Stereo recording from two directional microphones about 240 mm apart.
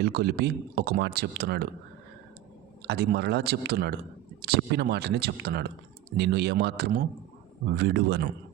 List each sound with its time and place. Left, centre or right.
0.0 s speech: right
2.8 s speech: right